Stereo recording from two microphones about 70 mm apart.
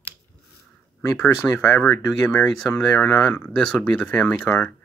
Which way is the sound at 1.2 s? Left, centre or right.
Left.